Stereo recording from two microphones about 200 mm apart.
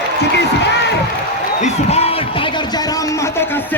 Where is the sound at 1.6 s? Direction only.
30° left (ahead or behind).